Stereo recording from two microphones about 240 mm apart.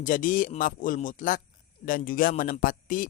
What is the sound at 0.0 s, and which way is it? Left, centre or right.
Speech, left.